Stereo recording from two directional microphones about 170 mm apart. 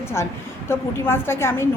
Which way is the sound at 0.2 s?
15° left (ahead or behind).